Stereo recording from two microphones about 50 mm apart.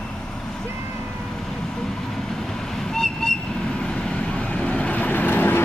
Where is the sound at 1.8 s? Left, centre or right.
Centre.